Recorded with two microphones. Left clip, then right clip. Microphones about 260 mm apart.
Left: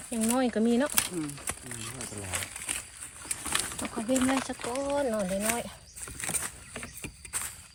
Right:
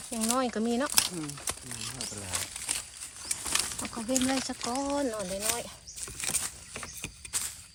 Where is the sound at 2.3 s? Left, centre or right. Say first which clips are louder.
Left 1 dB; centre.